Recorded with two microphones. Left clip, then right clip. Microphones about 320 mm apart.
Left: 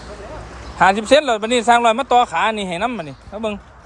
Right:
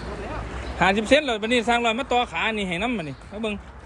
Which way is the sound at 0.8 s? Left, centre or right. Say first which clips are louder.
Left 6 dB; centre.